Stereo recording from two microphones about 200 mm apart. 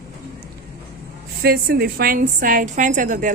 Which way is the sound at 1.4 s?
50° right (ahead or behind).